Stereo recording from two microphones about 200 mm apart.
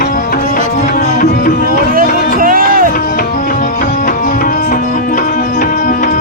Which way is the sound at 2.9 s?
45° left (ahead or behind).